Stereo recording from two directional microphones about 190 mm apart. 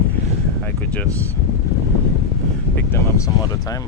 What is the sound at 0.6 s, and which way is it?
Speech, 10° left (ahead or behind).